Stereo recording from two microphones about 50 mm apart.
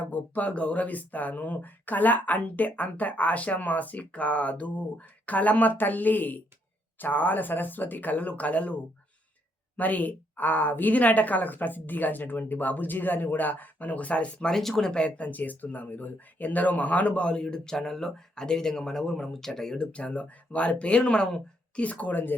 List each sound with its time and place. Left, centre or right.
0.0 s speech: left
14.5 s speech: centre
19.9 s speech: left
21.8 s speech: left